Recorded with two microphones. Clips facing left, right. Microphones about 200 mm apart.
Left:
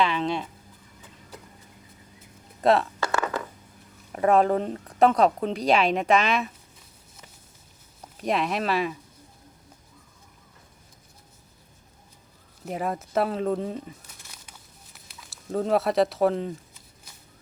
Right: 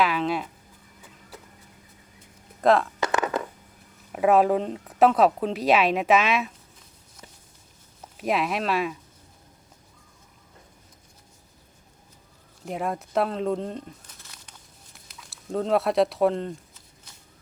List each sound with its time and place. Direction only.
0.0 s a sound: 5° right (ahead or behind)
2.6 s speech: centre (ahead or behind)
3.0 s a sound: 20° right (ahead or behind)
4.1 s speech: 5° right (ahead or behind)
8.2 s speech: centre (ahead or behind)
12.6 s speech: centre (ahead or behind)